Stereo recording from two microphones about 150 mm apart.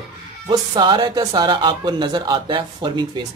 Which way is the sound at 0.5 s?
30° right (ahead or behind).